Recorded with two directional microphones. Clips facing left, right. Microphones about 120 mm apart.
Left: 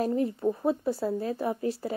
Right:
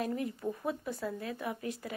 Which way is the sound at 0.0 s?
30° left (ahead or behind).